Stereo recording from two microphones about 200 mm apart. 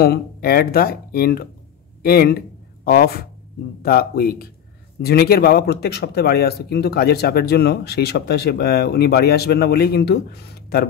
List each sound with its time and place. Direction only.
0.0 s speech: 50° left (ahead or behind)